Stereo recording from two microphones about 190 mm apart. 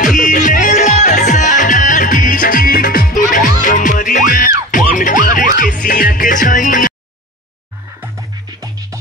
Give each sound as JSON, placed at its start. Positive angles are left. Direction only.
{"t": 0.0, "sound": "music", "side_deg": 40}
{"t": 8.0, "sound": "music", "side_deg": -15}